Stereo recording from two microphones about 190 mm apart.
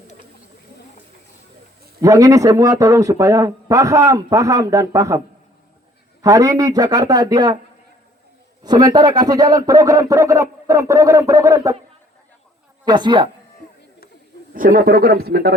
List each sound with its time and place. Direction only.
2.0 s a man's voice: 15° right (ahead or behind)
6.2 s speech: 20° right (ahead or behind)
8.6 s a man's voice: 20° right (ahead or behind)
12.8 s a woman's voice: 25° right (ahead or behind)
14.5 s speech: 45° right (ahead or behind)